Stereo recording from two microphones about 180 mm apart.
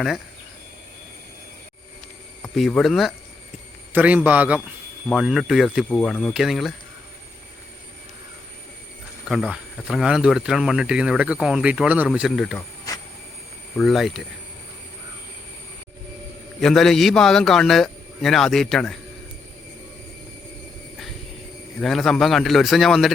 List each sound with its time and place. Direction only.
2.4 s a man's voice: 5° left (ahead or behind)
9.3 s speech: centre (ahead or behind)
12.9 s a sound: 20° left (ahead or behind)
13.7 s speech: centre (ahead or behind)
16.6 s speech: centre (ahead or behind)
21.8 s speech: centre (ahead or behind)